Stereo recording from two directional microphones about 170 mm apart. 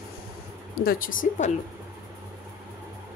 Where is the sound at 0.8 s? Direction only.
55° left (ahead or behind).